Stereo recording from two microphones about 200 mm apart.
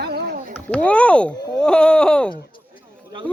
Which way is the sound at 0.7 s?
5° left (ahead or behind).